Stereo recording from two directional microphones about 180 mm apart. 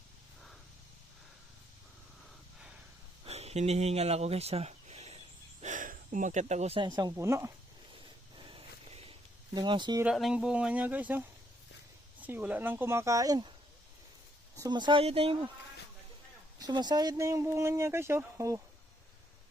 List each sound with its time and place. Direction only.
3.2 s speech: 35° right (ahead or behind); by 7.5 s 15° right (ahead or behind)
8.4 s a sound: 30° right (ahead or behind)
9.6 s speech: 25° right (ahead or behind)
10.0 s speech: 5° right (ahead or behind)
12.2 s speech: 10° right (ahead or behind)
14.5 s speech: 20° right (ahead or behind)
16.6 s speech: 25° right (ahead or behind)